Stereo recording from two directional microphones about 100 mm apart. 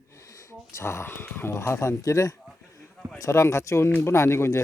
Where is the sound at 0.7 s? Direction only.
25° left (ahead or behind).